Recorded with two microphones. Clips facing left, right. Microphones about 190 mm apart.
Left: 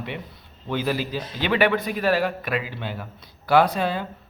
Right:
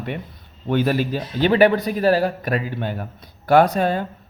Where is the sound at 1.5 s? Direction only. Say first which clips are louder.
Right 4 dB; 40° right (ahead or behind).